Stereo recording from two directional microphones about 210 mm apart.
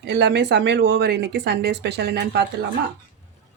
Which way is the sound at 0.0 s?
55° right (ahead or behind).